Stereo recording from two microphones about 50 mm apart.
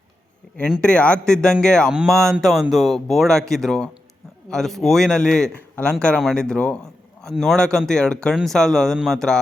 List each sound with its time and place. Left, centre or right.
0.8 s a man's voice: centre
5.8 s a man's voice: left